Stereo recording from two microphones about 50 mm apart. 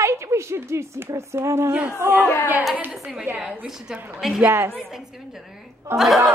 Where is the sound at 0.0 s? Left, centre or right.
Right.